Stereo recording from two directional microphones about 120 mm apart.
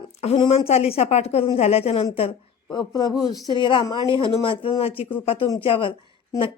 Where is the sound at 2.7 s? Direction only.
35° left (ahead or behind).